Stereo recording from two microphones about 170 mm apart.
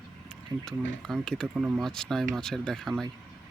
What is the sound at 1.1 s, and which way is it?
Speech, centre (ahead or behind).